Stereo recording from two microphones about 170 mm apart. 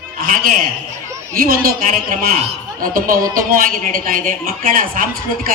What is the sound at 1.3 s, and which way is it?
Speech, 60° right (ahead or behind).